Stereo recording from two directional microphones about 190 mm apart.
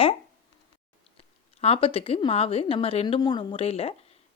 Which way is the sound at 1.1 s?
30° left (ahead or behind).